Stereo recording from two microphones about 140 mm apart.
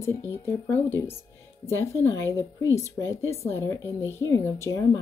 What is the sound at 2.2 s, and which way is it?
Speech, 25° right (ahead or behind).